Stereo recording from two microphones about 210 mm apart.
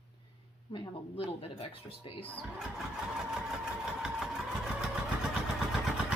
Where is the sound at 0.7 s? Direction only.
25° left (ahead or behind).